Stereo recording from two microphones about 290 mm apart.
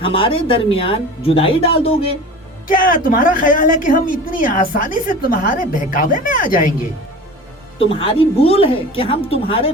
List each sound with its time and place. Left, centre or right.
0.0 s a woman's voice: centre
7.8 s a woman's voice: centre